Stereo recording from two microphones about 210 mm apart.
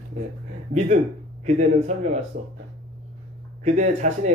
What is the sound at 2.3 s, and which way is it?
Speech, 45° right (ahead or behind).